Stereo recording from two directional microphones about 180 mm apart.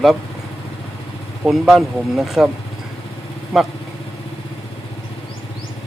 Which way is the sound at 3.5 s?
5° right (ahead or behind).